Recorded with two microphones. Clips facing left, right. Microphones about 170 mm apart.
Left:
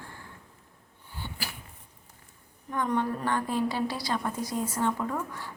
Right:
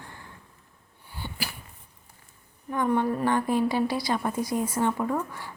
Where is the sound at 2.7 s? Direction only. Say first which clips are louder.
Right 4 dB; 10° right (ahead or behind).